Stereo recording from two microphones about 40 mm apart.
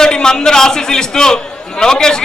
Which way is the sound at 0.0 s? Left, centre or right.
Centre.